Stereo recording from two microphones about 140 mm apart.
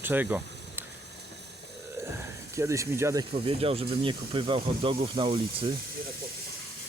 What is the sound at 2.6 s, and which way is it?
Speech, 20° right (ahead or behind).